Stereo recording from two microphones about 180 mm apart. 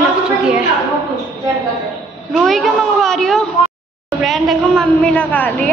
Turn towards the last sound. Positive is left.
turn(degrees=10)  # may be behind; listen again after turning